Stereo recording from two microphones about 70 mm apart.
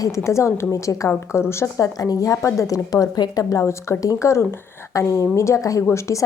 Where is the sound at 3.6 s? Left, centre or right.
Left.